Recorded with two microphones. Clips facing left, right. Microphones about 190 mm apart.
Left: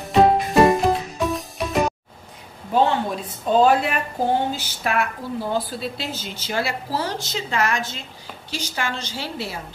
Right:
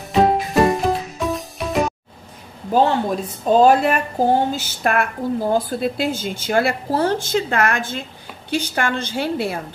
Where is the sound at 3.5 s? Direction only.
40° right (ahead or behind).